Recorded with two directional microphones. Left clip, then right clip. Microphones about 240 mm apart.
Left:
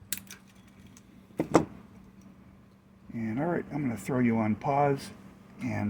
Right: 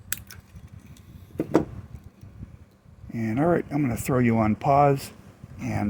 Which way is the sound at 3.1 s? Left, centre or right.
Right.